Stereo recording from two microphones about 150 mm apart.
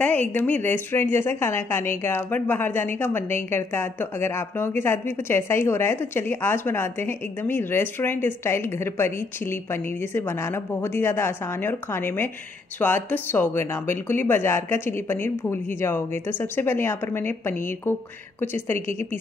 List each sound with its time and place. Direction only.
0.0 s a woman's voice: 10° left (ahead or behind)